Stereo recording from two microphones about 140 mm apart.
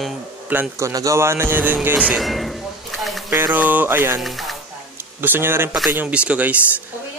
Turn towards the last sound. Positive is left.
turn(degrees=-10)  # may be behind; listen again after turning